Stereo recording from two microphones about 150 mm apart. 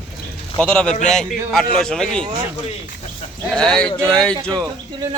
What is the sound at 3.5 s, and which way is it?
Speech, 5° left (ahead or behind).